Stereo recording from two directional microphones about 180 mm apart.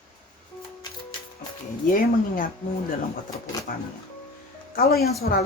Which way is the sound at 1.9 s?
50° left (ahead or behind).